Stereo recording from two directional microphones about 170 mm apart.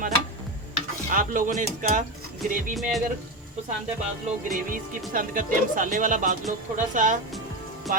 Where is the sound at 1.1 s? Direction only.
50° right (ahead or behind).